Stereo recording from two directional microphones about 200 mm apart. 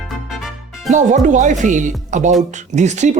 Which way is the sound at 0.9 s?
40° right (ahead or behind).